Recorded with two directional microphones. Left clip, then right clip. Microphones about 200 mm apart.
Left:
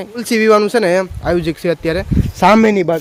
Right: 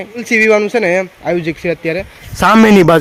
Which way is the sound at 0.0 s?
10° left (ahead or behind).